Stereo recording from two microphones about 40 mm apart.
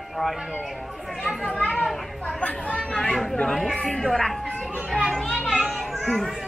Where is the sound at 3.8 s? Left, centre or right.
Centre.